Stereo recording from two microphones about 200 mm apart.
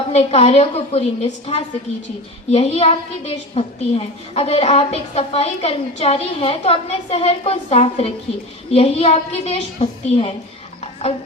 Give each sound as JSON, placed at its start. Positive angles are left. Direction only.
{"t": 0.1, "sound": "a woman's voice", "side_deg": 30}